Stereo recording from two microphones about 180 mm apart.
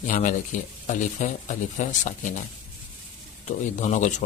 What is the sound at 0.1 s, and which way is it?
A man's voice, 45° left (ahead or behind).